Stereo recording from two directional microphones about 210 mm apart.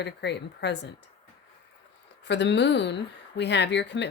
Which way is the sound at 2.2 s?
55° left (ahead or behind).